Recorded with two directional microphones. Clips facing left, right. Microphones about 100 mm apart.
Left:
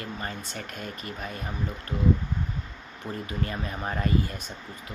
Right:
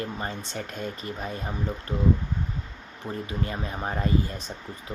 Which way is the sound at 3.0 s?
25° right (ahead or behind).